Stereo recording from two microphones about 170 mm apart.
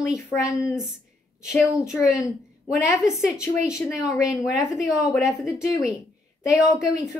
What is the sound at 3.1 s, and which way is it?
A woman's voice, 5° right (ahead or behind).